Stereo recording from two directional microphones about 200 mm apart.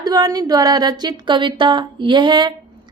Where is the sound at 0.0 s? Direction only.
20° right (ahead or behind).